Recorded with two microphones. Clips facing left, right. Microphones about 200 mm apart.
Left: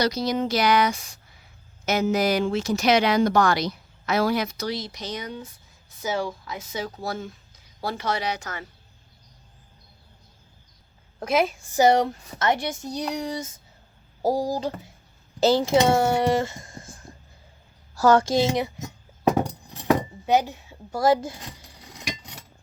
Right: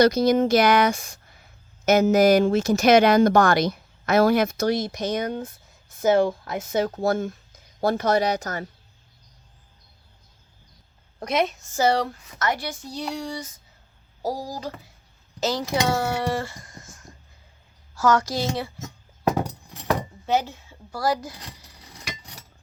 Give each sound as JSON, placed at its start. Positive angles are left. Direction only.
{"t": 0.0, "sound": "speech", "side_deg": -50}
{"t": 11.2, "sound": "a woman's voice", "side_deg": 5}
{"t": 11.7, "sound": "speech", "side_deg": 20}
{"t": 19.9, "sound": "a sound", "side_deg": 15}